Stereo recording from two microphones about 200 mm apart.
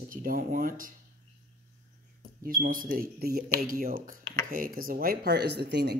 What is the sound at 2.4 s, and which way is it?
A man's voice, 45° right (ahead or behind).